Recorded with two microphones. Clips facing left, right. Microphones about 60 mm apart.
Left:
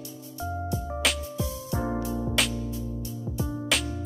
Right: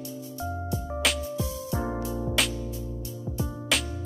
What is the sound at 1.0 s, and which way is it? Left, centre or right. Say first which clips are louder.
Music: even; centre.